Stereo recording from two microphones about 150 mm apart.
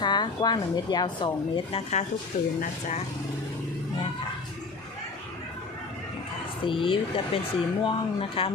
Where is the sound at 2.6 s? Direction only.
55° left (ahead or behind).